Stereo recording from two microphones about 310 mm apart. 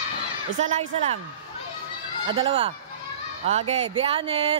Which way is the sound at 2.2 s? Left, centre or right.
Centre.